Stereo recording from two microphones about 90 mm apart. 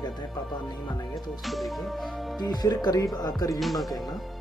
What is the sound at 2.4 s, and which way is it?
Speech, 45° left (ahead or behind).